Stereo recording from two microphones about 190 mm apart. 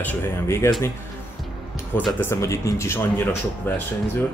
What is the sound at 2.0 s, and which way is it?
Speech, 10° left (ahead or behind).